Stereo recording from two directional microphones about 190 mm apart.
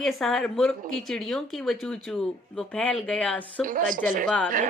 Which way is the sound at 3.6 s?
45° right (ahead or behind).